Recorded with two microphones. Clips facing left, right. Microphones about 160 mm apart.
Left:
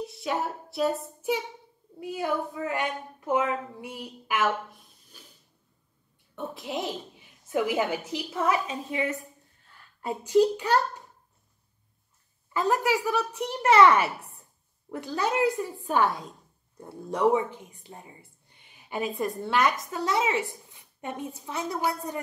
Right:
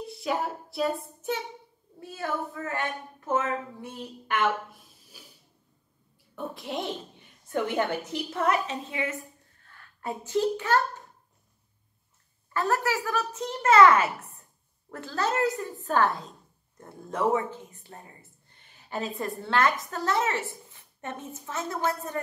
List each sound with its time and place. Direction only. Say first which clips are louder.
0.0 s speech: even; centre (ahead or behind)
2.0 s a woman's voice: left 3 dB; 15° left (ahead or behind); by 5.3 s 5° right (ahead or behind)
6.3 s a woman's voice: even; centre (ahead or behind)
10.0 s a woman's voice: left 5 dB; 15° left (ahead or behind)
12.5 s a woman's voice: left 2 dB; 15° left (ahead or behind)